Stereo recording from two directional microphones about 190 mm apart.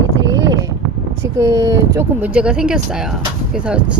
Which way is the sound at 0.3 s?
75° right (ahead or behind).